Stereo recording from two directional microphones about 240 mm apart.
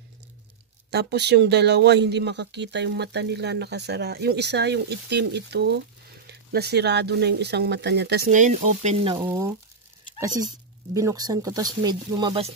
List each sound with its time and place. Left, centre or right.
0.8 s speech: right
9.2 s speech: centre
10.9 s speech: centre